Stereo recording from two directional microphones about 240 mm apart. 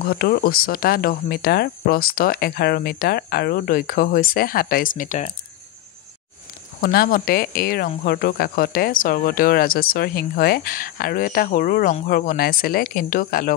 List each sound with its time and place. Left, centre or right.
0.0 s speech: left
6.8 s speech: left